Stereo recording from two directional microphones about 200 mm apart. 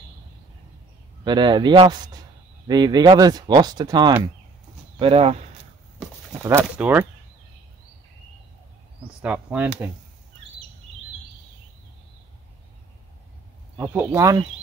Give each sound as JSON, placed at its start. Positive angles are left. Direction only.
{"t": 1.2, "sound": "speech", "side_deg": -20}
{"t": 6.4, "sound": "speech", "side_deg": -10}
{"t": 9.2, "sound": "speech", "side_deg": -5}
{"t": 13.7, "sound": "speech", "side_deg": -15}